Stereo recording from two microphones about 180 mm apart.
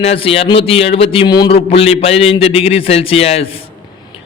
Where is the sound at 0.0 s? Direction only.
35° left (ahead or behind).